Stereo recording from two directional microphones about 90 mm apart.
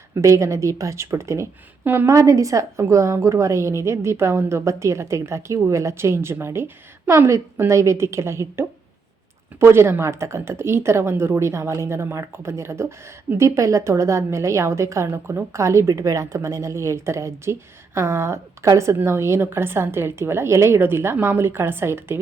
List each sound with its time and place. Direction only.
0.1 s a woman's voice: 35° right (ahead or behind)
2.0 s a woman's voice: 35° right (ahead or behind)